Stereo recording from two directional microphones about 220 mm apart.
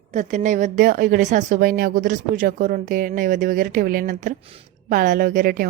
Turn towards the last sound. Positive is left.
turn(degrees=-40)  # may be behind; listen again after turning